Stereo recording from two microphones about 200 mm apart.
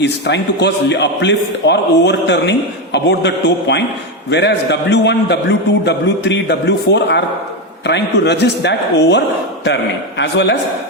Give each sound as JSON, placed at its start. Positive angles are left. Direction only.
{"t": 0.0, "sound": "a man's voice", "side_deg": 60}